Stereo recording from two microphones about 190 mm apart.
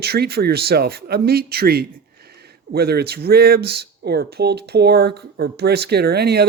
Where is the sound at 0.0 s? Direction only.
55° right (ahead or behind).